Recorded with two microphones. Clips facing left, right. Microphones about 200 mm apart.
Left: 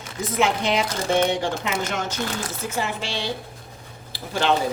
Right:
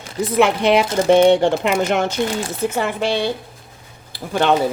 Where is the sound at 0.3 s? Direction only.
65° right (ahead or behind).